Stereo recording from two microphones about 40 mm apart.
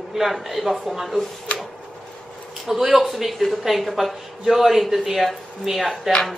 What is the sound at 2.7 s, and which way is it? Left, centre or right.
Speech, centre.